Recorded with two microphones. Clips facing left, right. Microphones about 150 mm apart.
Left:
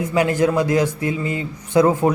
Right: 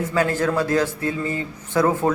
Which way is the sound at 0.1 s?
15° left (ahead or behind).